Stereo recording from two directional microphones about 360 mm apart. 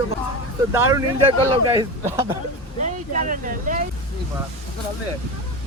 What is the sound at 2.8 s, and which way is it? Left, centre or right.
Speech, right.